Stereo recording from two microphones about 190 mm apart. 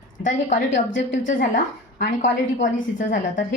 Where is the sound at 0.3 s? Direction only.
40° left (ahead or behind).